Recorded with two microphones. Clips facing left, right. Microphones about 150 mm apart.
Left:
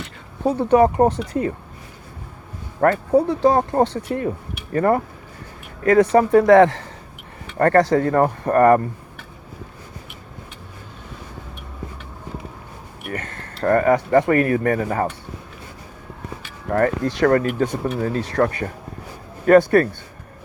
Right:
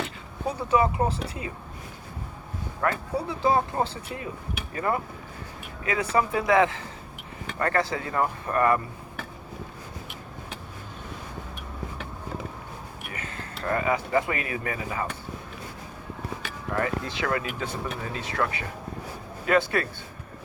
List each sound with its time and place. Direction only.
0.5 s speech: 55° left (ahead or behind)
2.8 s speech: 50° left (ahead or behind)
13.1 s speech: 60° left (ahead or behind)
16.6 s speech: 55° left (ahead or behind)